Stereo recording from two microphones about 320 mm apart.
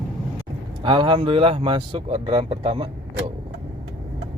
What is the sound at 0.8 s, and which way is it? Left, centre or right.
Speech, centre.